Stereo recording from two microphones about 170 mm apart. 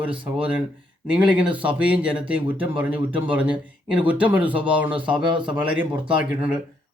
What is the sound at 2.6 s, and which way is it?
Speech, 10° right (ahead or behind).